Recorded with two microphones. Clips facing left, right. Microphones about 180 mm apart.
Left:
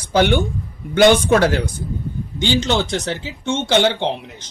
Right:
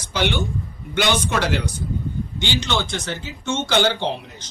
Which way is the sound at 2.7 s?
40° left (ahead or behind).